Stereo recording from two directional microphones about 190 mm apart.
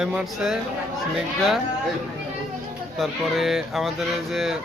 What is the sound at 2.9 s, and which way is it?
Speech, centre (ahead or behind).